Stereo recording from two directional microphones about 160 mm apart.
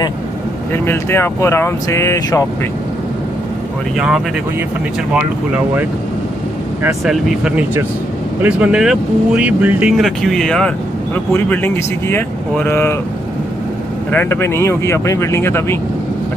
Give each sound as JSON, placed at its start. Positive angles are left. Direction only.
{"t": 0.8, "sound": "speech", "side_deg": 15}
{"t": 3.9, "sound": "speech", "side_deg": -5}
{"t": 7.1, "sound": "speech", "side_deg": -5}
{"t": 14.1, "sound": "speech", "side_deg": 15}